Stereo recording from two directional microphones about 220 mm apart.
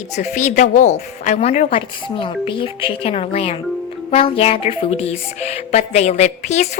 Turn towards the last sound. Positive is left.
turn(degrees=30)  # may be behind; listen again after turning